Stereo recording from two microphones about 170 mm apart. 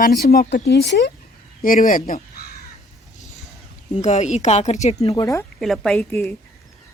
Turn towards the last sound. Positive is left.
turn(degrees=10)  # may be behind; listen again after turning